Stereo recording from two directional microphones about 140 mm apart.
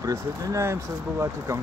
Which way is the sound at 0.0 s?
25° right (ahead or behind).